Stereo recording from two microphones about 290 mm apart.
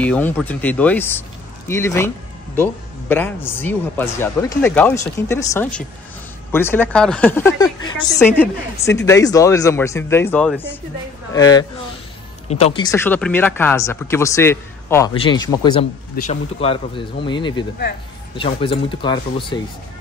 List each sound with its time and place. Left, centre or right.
0.0 s speech: centre